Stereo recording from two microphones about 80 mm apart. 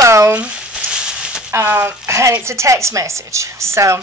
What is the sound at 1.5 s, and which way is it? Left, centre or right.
A woman's voice, right.